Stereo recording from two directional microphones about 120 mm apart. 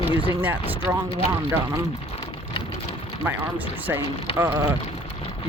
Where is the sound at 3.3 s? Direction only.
15° right (ahead or behind).